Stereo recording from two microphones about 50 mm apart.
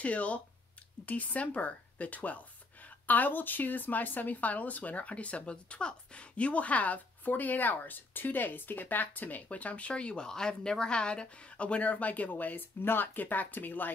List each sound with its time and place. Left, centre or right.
0.0 s speech: left